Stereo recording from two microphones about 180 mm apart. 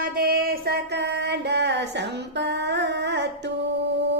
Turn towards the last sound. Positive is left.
turn(degrees=-70)  # may be behind; listen again after turning